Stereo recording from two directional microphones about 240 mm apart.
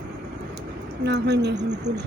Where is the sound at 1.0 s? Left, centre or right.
Right.